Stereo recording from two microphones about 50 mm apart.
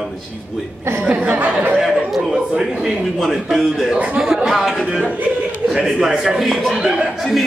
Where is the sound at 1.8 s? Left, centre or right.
Centre.